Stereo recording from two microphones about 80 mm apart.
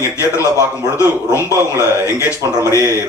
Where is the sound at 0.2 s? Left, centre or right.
Left.